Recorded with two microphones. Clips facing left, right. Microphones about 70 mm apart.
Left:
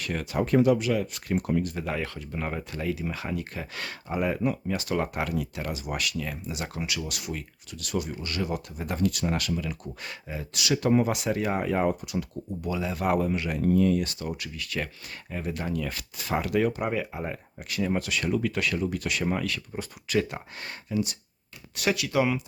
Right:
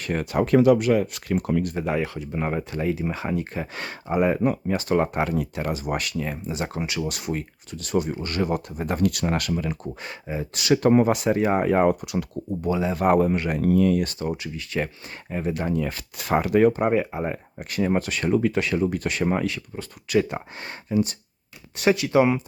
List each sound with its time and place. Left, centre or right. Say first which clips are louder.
0.0 s speech: right 5 dB; right
0.4 s speech: right 5 dB; right
0.8 s speech: right 6 dB; right
1.7 s speech: right 6 dB; centre
10.6 s speech: right 5 dB; right
12.6 s speech: right 6 dB; right
13.0 s speech: right 6 dB; right
13.6 s speech: right 2 dB; right
14.0 s speech: right 5 dB; right
16.1 s speech: right 6 dB; right
16.4 s speech: right 7 dB; right